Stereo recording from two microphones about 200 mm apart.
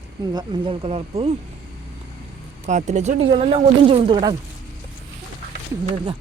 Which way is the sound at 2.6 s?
35° right (ahead or behind).